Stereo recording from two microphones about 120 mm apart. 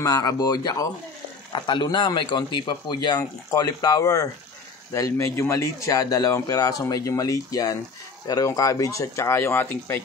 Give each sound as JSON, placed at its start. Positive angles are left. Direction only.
{"t": 0.0, "sound": "speech", "side_deg": 30}